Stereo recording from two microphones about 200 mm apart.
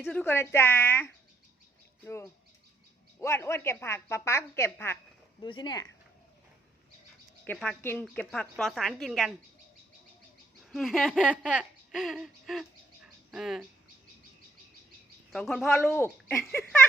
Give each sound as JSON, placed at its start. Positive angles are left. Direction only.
{"t": 0.0, "sound": "a woman's voice", "side_deg": 5}
{"t": 7.4, "sound": "a woman's voice", "side_deg": 5}
{"t": 10.6, "sound": "speech", "side_deg": 0}
{"t": 15.3, "sound": "speech", "side_deg": 0}
{"t": 15.8, "sound": "a woman's voice", "side_deg": 10}